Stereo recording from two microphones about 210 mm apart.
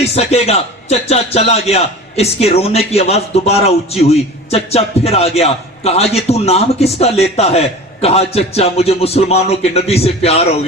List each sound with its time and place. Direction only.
0.0 s speech: 30° left (ahead or behind)